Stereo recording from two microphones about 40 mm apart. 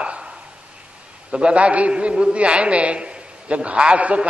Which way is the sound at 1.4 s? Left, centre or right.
Right.